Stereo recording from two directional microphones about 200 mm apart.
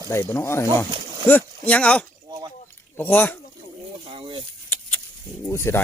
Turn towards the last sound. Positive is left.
turn(degrees=15)  # may be behind; listen again after turning